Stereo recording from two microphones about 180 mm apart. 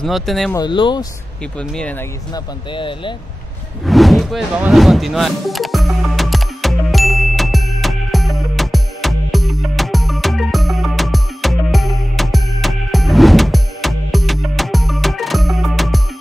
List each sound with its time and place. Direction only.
0.0 s speech: centre (ahead or behind)
0.6 s speech: 25° left (ahead or behind)
1.6 s speech: 5° left (ahead or behind)
2.3 s speech: 25° left (ahead or behind)
3.8 s a sound: centre (ahead or behind)